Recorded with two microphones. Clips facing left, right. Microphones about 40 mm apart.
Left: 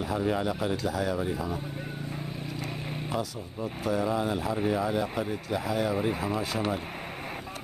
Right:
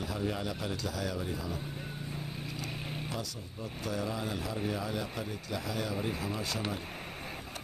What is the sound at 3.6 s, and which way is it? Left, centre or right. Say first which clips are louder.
Speech: left 7 dB; centre.